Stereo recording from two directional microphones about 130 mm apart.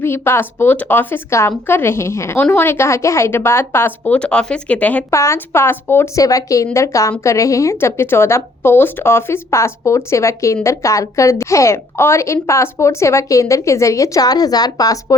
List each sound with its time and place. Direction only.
0.0 s speech: 20° left (ahead or behind)
5.1 s a woman's voice: 20° left (ahead or behind)